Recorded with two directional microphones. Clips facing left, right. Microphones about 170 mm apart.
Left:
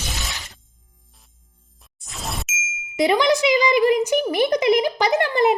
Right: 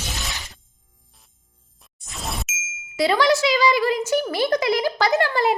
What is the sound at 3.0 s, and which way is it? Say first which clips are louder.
A child's voice: left 1 dB; 20° left (ahead or behind).